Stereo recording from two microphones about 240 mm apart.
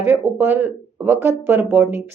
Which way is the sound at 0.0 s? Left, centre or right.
Centre.